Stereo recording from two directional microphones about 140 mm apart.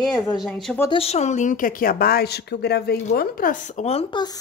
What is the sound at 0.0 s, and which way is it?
Speech, 5° left (ahead or behind).